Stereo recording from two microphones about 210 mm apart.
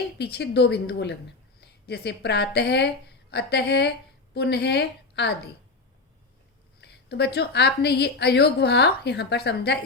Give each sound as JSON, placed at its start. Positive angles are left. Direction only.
{"t": 0.2, "sound": "a woman's voice", "side_deg": 50}
{"t": 6.8, "sound": "a woman's voice", "side_deg": 50}